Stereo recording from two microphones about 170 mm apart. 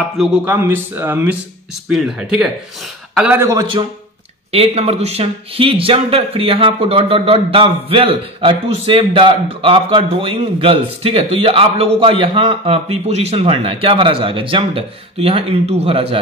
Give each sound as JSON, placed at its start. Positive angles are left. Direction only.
{"t": 0.2, "sound": "speech", "side_deg": -10}
{"t": 3.4, "sound": "a man's voice", "side_deg": -25}